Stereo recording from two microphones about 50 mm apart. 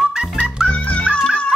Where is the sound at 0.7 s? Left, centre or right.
Left.